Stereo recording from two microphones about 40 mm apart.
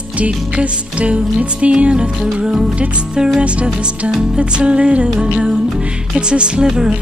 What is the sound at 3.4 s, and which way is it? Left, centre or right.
Music, right.